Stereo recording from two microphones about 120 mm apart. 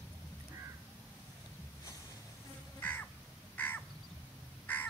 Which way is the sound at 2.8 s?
15° left (ahead or behind).